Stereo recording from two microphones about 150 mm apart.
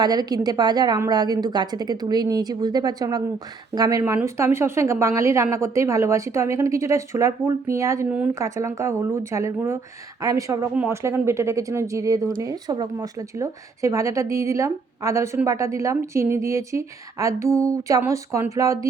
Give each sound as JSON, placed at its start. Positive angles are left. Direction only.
{"t": 0.0, "sound": "a woman's voice", "side_deg": -25}